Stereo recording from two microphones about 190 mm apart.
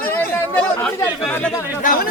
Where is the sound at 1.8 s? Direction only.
45° left (ahead or behind).